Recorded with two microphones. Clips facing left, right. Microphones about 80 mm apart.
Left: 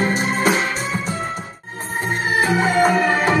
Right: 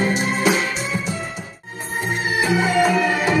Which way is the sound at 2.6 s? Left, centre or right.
Left.